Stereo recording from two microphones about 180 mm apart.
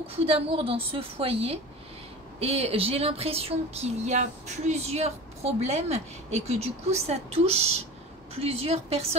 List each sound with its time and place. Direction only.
0.1 s speech: 30° right (ahead or behind)